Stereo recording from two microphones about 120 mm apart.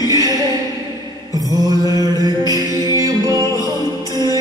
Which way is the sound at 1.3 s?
30° right (ahead or behind).